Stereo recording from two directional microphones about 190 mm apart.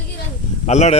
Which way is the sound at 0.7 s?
35° left (ahead or behind).